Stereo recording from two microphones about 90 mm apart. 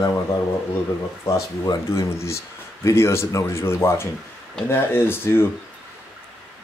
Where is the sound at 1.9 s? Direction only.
35° left (ahead or behind).